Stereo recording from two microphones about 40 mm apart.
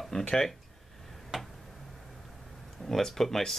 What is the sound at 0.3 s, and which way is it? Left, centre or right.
Speech, centre.